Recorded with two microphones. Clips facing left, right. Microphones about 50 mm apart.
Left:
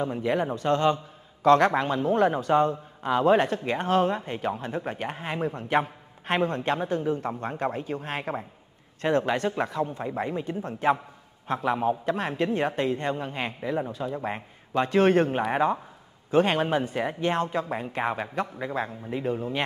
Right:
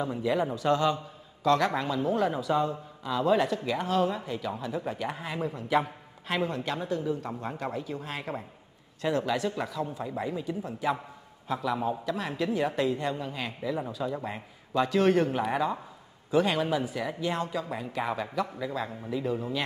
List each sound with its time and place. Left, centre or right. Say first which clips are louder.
0.2 s a man's voice: right 1 dB; left